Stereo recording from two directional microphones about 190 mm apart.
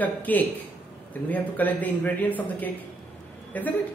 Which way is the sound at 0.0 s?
10° left (ahead or behind).